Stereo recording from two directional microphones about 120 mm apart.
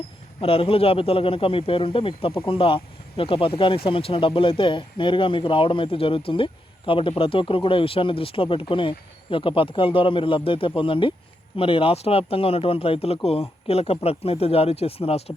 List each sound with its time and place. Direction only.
0.4 s speech: 50° left (ahead or behind)